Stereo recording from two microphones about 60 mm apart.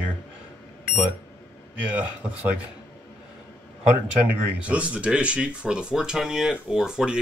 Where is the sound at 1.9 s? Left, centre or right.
Right.